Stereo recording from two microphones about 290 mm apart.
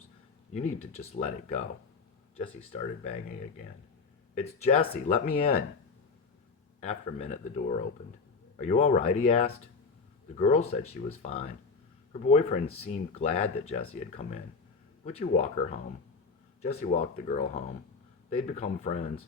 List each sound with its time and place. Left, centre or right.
0.5 s speech: left
4.4 s speech: left
6.7 s speech: left
15.0 s speech: left